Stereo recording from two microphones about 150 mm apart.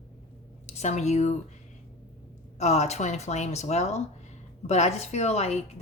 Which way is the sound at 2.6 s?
50° left (ahead or behind).